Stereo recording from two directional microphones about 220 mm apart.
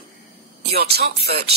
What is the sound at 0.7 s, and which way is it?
Speech, 45° right (ahead or behind).